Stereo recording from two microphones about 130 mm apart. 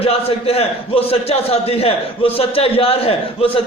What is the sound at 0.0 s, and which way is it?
A man's voice, 50° left (ahead or behind).